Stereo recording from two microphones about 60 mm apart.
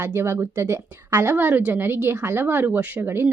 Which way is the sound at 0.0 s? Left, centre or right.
Right.